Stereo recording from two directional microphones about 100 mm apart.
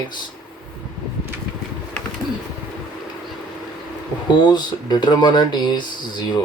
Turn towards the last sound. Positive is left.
turn(degrees=45)  # may be behind; listen again after turning